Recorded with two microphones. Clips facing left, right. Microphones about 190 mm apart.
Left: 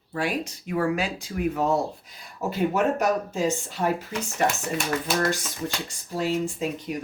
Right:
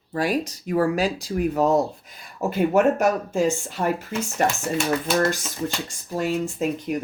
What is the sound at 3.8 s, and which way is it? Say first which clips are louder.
Speech: right 1 dB; 60° right (ahead or behind).